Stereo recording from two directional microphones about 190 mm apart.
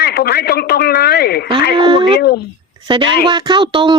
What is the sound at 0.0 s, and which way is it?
Speech, 60° left (ahead or behind).